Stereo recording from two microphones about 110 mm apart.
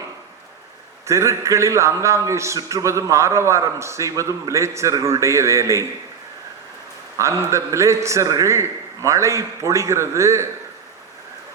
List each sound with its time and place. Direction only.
1.0 s a man's voice: 25° right (ahead or behind)
7.2 s a man's voice: 25° right (ahead or behind)